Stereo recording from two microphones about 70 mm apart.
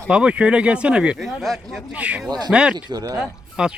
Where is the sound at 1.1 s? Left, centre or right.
Centre.